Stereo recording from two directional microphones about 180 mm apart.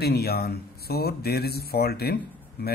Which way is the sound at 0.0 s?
60° left (ahead or behind).